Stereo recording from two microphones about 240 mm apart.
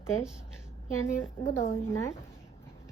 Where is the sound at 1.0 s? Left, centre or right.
Centre.